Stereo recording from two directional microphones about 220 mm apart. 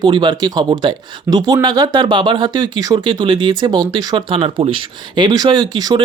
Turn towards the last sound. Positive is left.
turn(degrees=-20)  # may be behind; listen again after turning